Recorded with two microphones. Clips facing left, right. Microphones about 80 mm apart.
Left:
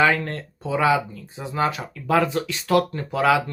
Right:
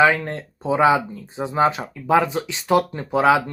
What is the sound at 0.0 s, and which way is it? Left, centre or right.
Speech, centre.